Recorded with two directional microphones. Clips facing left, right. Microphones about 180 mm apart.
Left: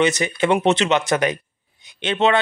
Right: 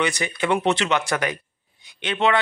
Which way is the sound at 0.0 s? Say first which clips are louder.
Left 5 dB; 20° left (ahead or behind).